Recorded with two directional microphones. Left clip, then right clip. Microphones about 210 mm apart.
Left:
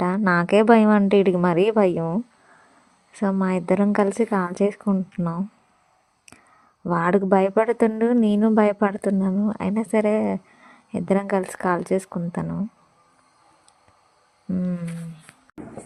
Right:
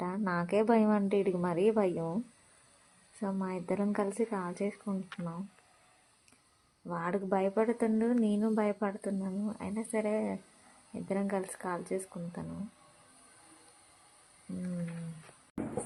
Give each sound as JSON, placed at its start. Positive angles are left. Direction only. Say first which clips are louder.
{"t": 0.0, "sound": "a woman's voice", "louder": "left 14 dB", "side_deg": 30}
{"t": 6.8, "sound": "a woman's voice", "louder": "left 14 dB", "side_deg": 45}